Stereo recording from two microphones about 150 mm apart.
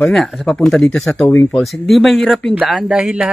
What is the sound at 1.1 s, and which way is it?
Speech, 15° left (ahead or behind).